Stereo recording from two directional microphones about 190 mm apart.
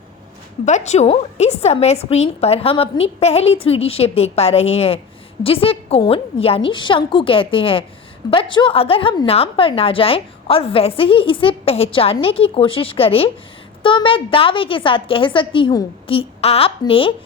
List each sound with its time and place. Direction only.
0.6 s a woman's voice: 35° left (ahead or behind)